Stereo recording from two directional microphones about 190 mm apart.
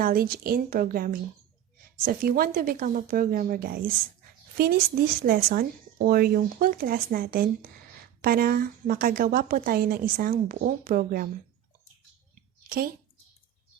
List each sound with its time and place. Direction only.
0.0 s a woman's voice: 50° right (ahead or behind)
12.6 s a woman's voice: 50° right (ahead or behind)